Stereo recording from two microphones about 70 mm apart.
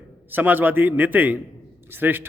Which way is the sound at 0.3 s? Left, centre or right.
Right.